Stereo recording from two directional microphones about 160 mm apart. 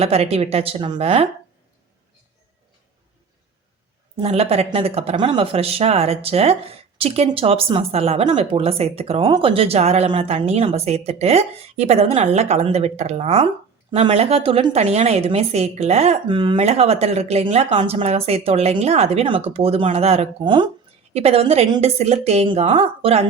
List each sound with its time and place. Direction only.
0.0 s speech: 40° right (ahead or behind)
4.2 s speech: 40° right (ahead or behind)